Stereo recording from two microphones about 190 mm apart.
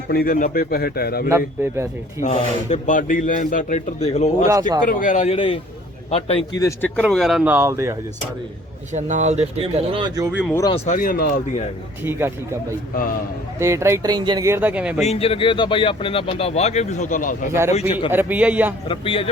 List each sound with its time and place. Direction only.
0.1 s speech: 50° left (ahead or behind)
1.3 s speech: 15° right (ahead or behind)
2.3 s a man's voice: 35° left (ahead or behind)
6.6 s a man's voice: 15° left (ahead or behind)
6.9 s speech: 5° left (ahead or behind); by 7.9 s 15° right (ahead or behind)
8.9 s speech: 40° right (ahead or behind)
10.5 s speech: 20° left (ahead or behind)
10.8 s speech: 45° left (ahead or behind)
13.6 s speech: 15° right (ahead or behind)
15.0 s speech: 30° left (ahead or behind)
17.7 s a man's voice: 35° left (ahead or behind)
18.1 s speech: 10° right (ahead or behind)
18.9 s speech: 30° left (ahead or behind)